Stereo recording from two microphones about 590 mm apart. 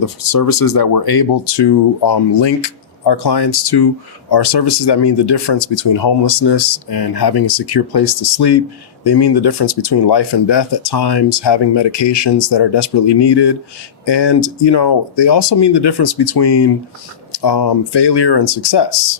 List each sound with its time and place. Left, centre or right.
0.0 s speech: left